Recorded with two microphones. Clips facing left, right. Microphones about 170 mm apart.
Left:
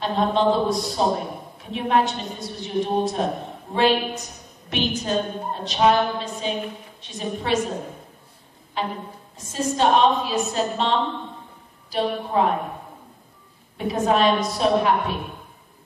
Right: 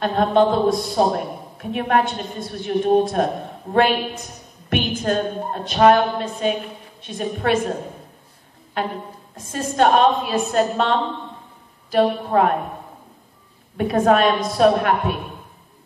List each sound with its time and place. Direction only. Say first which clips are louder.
0.0 s a man's voice: right 4 dB; 55° right (ahead or behind)
8.8 s a woman's voice: right 2 dB; 55° right (ahead or behind)
13.7 s a woman's voice: right 4 dB; 55° right (ahead or behind)